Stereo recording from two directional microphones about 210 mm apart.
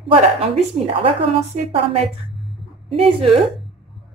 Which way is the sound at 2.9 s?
25° right (ahead or behind).